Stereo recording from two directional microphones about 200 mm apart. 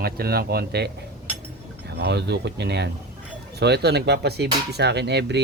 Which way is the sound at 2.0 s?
55° right (ahead or behind).